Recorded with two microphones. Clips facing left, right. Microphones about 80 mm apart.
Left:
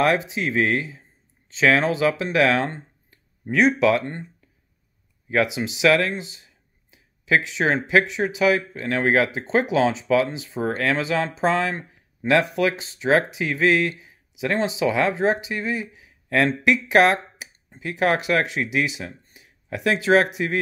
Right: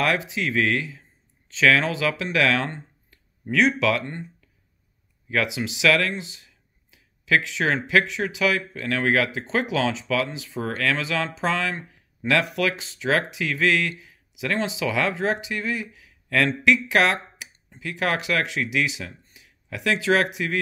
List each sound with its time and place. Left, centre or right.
0.0 s speech: left